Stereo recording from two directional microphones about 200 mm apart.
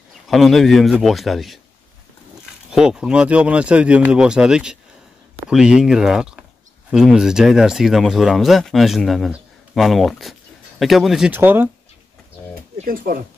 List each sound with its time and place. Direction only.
0.3 s speech: centre (ahead or behind)
2.7 s speech: 5° right (ahead or behind)
12.7 s speech: 45° right (ahead or behind)